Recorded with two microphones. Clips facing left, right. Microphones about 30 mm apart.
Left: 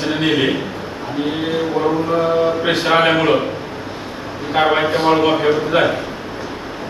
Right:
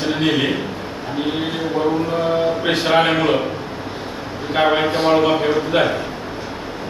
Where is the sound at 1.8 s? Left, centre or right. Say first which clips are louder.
Left 1 dB; centre.